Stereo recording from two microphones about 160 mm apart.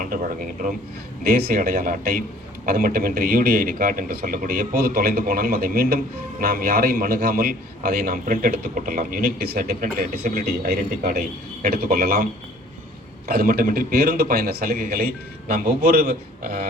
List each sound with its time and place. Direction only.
0.0 s a man's voice: 60° right (ahead or behind)
1.2 s a man's voice: 75° right (ahead or behind)